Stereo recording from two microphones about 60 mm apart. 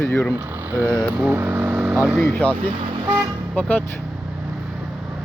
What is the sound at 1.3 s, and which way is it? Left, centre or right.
Vehicle, right.